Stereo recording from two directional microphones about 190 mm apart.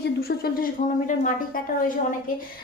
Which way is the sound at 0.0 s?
55° left (ahead or behind).